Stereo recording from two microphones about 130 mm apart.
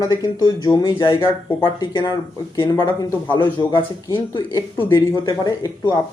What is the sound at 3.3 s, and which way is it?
Speech, 35° left (ahead or behind).